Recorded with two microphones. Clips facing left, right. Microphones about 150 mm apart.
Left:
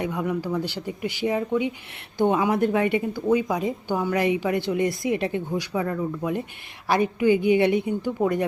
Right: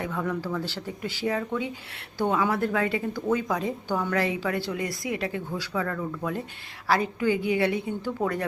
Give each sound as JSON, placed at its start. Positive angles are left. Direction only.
{"t": 0.0, "sound": "a woman's voice", "side_deg": 15}